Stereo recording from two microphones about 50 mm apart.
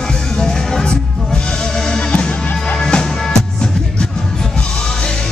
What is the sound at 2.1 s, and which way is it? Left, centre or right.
Music, left.